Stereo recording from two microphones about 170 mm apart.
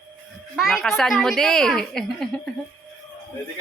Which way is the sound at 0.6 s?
Centre (ahead or behind).